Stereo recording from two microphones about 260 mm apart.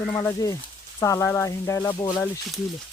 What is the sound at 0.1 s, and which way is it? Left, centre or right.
Speech, centre.